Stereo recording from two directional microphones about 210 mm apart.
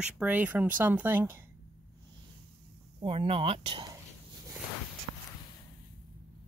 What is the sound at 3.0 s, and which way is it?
Speech, 30° right (ahead or behind).